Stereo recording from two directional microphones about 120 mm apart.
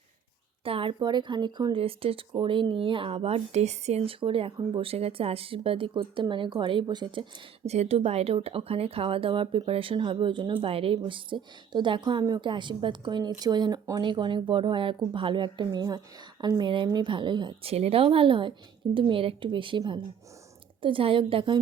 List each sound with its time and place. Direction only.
0.6 s a woman's voice: 50° right (ahead or behind)
0.9 s a woman's voice: 40° right (ahead or behind)
1.8 s speech: 55° right (ahead or behind)
7.6 s a woman's voice: 60° right (ahead or behind); by 17.7 s 40° right (ahead or behind)
17.7 s speech: 55° right (ahead or behind)